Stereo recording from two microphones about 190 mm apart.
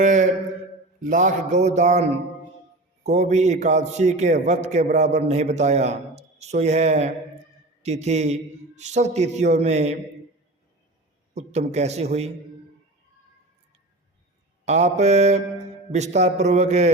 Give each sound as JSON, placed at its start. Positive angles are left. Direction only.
{"t": 0.0, "sound": "a sound", "side_deg": -40}
{"t": 1.0, "sound": "a man's voice", "side_deg": -40}
{"t": 11.3, "sound": "a man's voice", "side_deg": -35}
{"t": 14.6, "sound": "a man's voice", "side_deg": -35}